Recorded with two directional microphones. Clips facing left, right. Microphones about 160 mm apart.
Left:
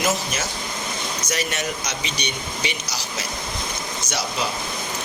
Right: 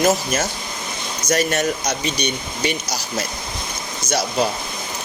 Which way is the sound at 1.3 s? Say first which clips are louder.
Right 9 dB; 45° right (ahead or behind).